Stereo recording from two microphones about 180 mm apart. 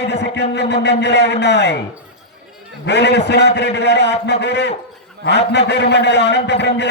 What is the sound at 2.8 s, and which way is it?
A man's voice, 70° left (ahead or behind).